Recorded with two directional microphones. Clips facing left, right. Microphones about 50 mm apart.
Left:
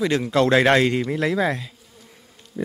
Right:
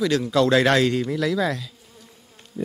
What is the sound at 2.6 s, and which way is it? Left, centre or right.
Speech, left.